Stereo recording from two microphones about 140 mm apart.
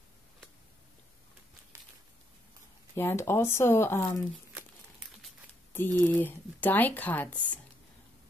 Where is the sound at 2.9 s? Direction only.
15° left (ahead or behind).